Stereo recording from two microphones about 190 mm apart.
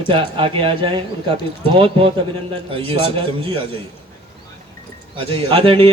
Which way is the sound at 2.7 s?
25° right (ahead or behind).